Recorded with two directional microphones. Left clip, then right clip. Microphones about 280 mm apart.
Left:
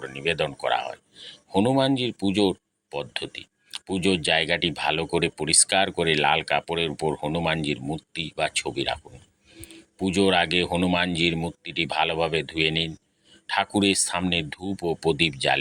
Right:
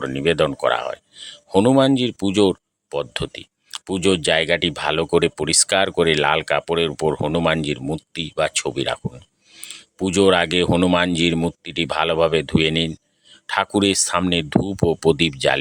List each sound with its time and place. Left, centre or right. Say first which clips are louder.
0.1 s speech: right 6 dB; right
10.0 s speech: right 5 dB; right